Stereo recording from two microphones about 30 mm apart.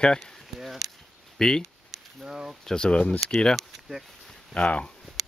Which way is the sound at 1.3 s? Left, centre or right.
Left.